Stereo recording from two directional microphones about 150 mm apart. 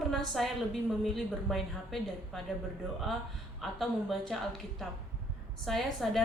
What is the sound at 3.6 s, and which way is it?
A woman's voice, centre (ahead or behind).